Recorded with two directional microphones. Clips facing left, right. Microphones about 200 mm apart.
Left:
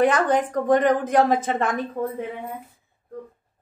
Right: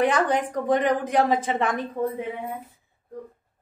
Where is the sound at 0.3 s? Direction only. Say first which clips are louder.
Left 3 dB; 50° left (ahead or behind).